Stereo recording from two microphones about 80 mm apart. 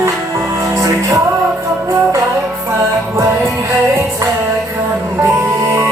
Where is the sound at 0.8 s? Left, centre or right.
Right.